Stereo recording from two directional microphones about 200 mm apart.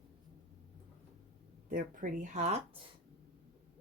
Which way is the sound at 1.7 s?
45° right (ahead or behind).